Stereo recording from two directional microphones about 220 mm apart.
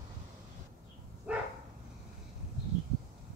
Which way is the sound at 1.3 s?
5° right (ahead or behind).